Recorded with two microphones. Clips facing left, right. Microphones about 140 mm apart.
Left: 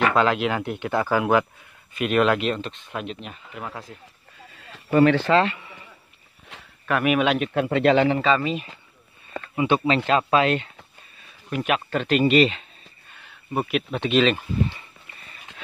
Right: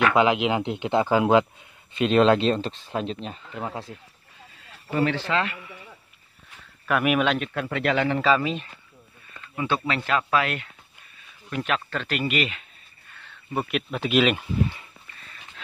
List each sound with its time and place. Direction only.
0.1 s speech: 15° right (ahead or behind)
4.9 s speech: 65° left (ahead or behind)
5.2 s a man's voice: 35° left (ahead or behind)
6.5 s a sound: 90° left
6.9 s speech: centre (ahead or behind)
7.3 s speech: 20° left (ahead or behind)
8.2 s speech: centre (ahead or behind)
9.6 s speech: 20° left (ahead or behind)
11.5 s speech: 15° left (ahead or behind); by 12.6 s 30° left (ahead or behind)
13.1 s a sound: 15° left (ahead or behind)
13.7 s speech: centre (ahead or behind)